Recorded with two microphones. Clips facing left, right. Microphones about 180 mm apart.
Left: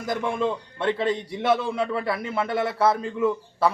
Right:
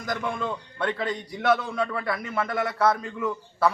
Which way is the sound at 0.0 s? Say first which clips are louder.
Left 4 dB; 25° left (ahead or behind).